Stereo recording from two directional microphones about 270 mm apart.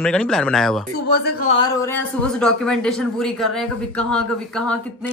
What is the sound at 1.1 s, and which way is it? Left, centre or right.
Speech, left.